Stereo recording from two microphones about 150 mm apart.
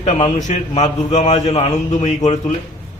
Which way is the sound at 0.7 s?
50° left (ahead or behind).